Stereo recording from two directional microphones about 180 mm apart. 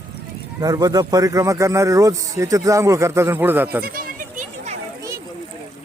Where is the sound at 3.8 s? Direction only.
55° right (ahead or behind).